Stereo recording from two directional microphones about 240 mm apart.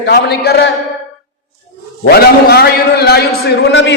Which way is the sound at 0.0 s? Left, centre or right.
Left.